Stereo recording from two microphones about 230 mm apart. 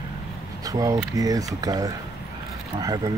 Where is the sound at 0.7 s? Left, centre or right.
Centre.